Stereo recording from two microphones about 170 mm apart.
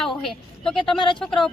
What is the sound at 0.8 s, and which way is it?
Speech, 30° left (ahead or behind).